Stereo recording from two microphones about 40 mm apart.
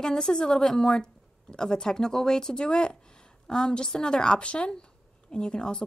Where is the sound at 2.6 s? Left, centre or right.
Left.